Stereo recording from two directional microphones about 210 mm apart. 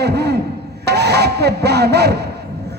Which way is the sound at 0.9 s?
50° right (ahead or behind).